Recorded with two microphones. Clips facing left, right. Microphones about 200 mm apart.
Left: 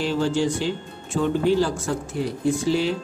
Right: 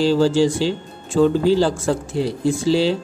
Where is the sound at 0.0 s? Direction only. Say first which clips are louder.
Right 7 dB; 35° right (ahead or behind).